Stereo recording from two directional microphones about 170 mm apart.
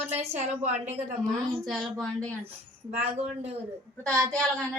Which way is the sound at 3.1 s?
35° right (ahead or behind).